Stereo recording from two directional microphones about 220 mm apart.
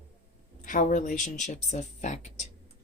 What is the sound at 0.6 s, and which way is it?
Speech, 35° left (ahead or behind).